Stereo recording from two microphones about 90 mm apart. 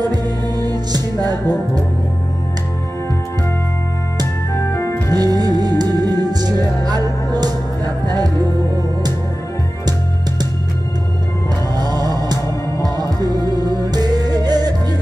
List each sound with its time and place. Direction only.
0.0 s music: 45° right (ahead or behind)
4.6 s organ: 30° left (ahead or behind)
5.1 s music: 45° right (ahead or behind)
11.7 s music: 45° right (ahead or behind)